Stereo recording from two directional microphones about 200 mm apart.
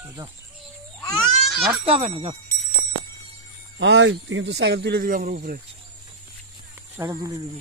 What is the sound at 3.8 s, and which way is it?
Speech, 60° right (ahead or behind).